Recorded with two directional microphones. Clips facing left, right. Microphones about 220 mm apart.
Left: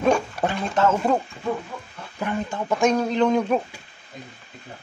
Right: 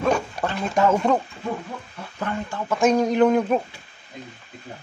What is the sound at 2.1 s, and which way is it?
Speech, 15° left (ahead or behind).